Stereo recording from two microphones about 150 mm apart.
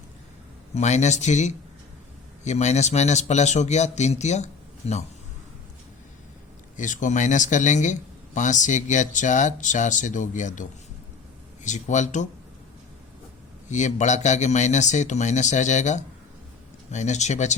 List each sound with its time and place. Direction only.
0.7 s a man's voice: 50° left (ahead or behind)
6.7 s a man's voice: 55° left (ahead or behind)
13.7 s a man's voice: 55° left (ahead or behind)